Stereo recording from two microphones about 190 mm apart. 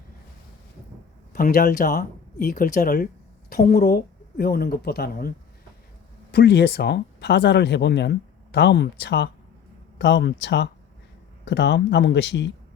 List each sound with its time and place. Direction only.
1.3 s speech: 50° left (ahead or behind)
6.3 s speech: 60° left (ahead or behind)